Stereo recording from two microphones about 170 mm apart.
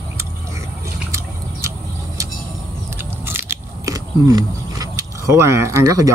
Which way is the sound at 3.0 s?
15° right (ahead or behind).